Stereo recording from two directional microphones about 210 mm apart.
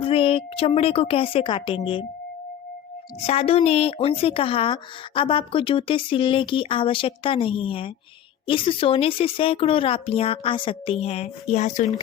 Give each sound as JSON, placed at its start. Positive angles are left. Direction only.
{"t": 0.0, "sound": "a woman's voice", "side_deg": 25}
{"t": 3.2, "sound": "a woman's voice", "side_deg": 30}